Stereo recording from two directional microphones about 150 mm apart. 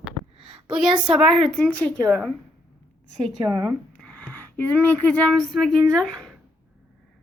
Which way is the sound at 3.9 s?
10° left (ahead or behind).